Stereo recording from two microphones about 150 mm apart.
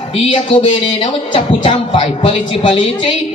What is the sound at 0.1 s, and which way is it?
A woman's voice, 40° left (ahead or behind).